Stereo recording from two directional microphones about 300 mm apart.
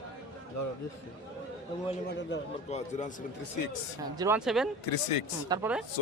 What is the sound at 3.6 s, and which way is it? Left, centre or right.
Speech, left.